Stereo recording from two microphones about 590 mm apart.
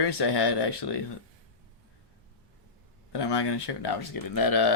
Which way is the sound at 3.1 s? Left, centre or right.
Left.